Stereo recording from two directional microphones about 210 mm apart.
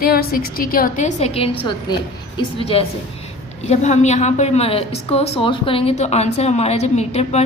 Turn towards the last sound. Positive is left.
turn(degrees=30)  # may be behind; listen again after turning